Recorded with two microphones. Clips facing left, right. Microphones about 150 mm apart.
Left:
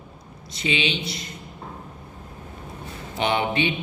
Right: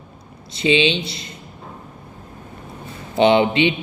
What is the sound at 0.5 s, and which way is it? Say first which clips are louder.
Mantra: right 8 dB; 25° right (ahead or behind).